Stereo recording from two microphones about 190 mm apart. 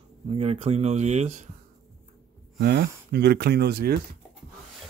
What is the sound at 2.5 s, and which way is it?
Speech, 60° right (ahead or behind).